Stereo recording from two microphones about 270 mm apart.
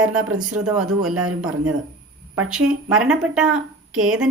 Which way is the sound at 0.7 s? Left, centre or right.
Centre.